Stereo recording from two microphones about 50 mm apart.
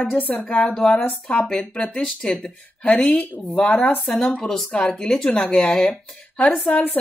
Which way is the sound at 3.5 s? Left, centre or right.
Left.